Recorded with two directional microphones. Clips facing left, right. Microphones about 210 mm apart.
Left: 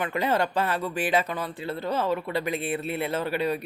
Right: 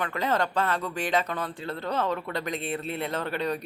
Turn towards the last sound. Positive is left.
turn(degrees=5)  # may be behind; listen again after turning